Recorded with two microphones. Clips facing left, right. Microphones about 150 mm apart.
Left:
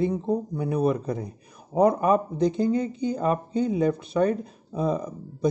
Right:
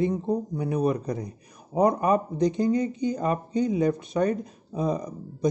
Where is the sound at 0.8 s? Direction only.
40° right (ahead or behind).